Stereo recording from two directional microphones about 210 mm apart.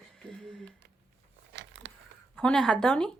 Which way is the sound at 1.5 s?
60° right (ahead or behind).